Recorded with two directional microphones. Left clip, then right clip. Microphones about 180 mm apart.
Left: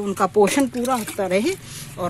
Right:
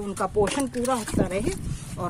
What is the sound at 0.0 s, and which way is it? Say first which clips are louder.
Speech: left 7 dB; 45° left (ahead or behind).